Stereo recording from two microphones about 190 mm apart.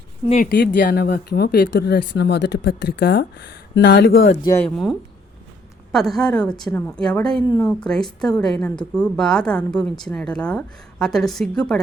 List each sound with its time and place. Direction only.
0.4 s speech: 70° left (ahead or behind)
0.8 s speech: 55° left (ahead or behind)
4.4 s speech: 20° left (ahead or behind)
4.6 s a woman's voice: centre (ahead or behind)